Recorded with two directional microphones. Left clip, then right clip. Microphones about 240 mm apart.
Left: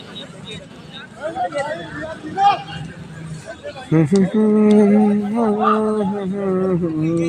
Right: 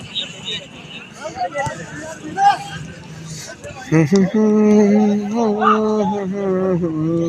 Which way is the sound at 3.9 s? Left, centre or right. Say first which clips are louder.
Right 1 dB; centre.